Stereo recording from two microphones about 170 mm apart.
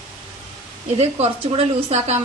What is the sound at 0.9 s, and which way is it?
A woman's voice, 40° right (ahead or behind).